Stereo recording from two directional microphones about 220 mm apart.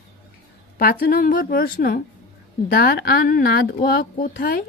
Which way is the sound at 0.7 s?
40° left (ahead or behind).